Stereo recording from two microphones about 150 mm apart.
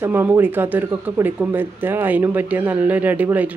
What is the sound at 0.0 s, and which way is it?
Speech, 15° right (ahead or behind).